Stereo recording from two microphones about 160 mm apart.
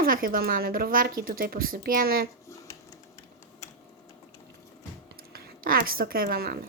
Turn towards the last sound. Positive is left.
turn(degrees=-75)  # may be behind; listen again after turning